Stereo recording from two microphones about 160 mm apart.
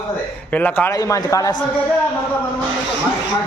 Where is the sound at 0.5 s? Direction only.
10° left (ahead or behind).